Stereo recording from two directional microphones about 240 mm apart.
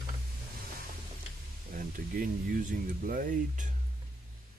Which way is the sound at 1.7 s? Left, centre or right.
Right.